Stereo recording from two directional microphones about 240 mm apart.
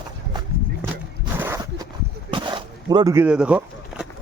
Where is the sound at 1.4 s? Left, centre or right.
Centre.